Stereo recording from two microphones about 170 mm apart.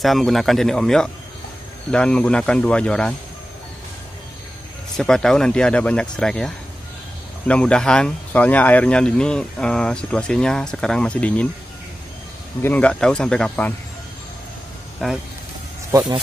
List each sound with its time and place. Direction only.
0.0 s speech: centre (ahead or behind)
4.9 s speech: 5° left (ahead or behind)
12.6 s speech: 10° left (ahead or behind)
15.0 s speech: centre (ahead or behind)